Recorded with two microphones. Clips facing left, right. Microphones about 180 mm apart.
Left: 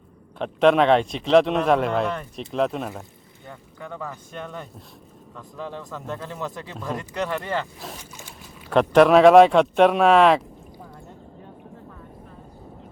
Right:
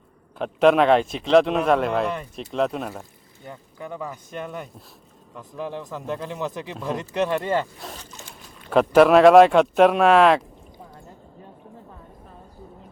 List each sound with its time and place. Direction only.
0.3 s speech: centre (ahead or behind)
3.4 s speech: 15° right (ahead or behind)
7.9 s zipper: 10° left (ahead or behind)
8.7 s speech: 5° right (ahead or behind)